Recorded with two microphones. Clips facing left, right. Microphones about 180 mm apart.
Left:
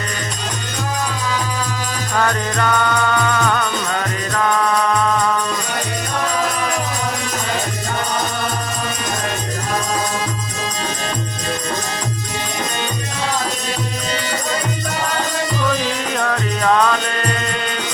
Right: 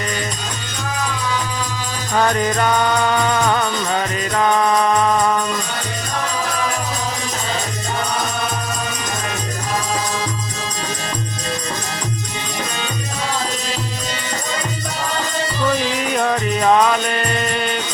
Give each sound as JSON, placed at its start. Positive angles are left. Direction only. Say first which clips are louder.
{"t": 2.1, "sound": "music", "louder": "right 3 dB", "side_deg": -20}
{"t": 16.1, "sound": "music", "louder": "right 4 dB", "side_deg": -15}